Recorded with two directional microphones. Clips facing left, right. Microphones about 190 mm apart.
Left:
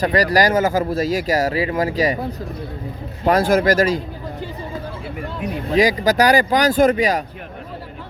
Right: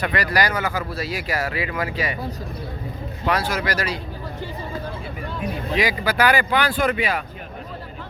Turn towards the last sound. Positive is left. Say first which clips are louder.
# left 7 dB
turn(degrees=40)  # may be behind; listen again after turning